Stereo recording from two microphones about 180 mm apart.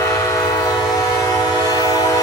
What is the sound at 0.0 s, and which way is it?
Train, 15° left (ahead or behind).